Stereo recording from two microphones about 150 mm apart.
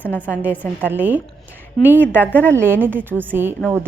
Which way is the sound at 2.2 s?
10° left (ahead or behind).